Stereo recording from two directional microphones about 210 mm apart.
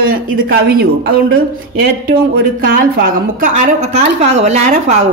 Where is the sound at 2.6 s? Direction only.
40° right (ahead or behind).